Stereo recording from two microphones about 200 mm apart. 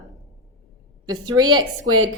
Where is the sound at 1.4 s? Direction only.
20° right (ahead or behind).